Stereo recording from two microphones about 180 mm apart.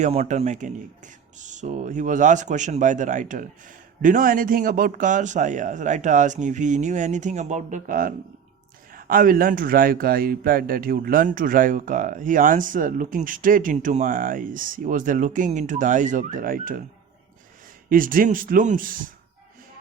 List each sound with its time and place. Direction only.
0.0 s speech: 40° right (ahead or behind)
17.8 s speech: 50° right (ahead or behind)